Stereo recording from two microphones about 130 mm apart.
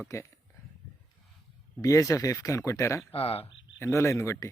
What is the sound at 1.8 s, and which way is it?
Speech, 25° left (ahead or behind).